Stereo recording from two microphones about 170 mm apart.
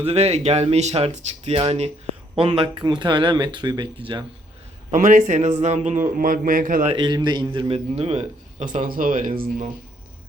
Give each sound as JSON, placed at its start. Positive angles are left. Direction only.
{"t": 0.0, "sound": "a man's voice", "side_deg": -35}
{"t": 4.9, "sound": "speech", "side_deg": -50}
{"t": 6.8, "sound": "a man's voice", "side_deg": -25}